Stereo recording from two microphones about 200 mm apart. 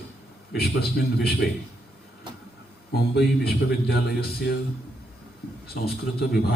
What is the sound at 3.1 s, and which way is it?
A man's voice, 55° left (ahead or behind).